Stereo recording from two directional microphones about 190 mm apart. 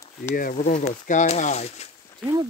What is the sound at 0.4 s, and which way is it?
Speech, 45° left (ahead or behind).